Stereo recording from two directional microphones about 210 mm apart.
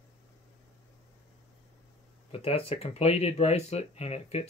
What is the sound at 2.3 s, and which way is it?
Speech, 25° left (ahead or behind).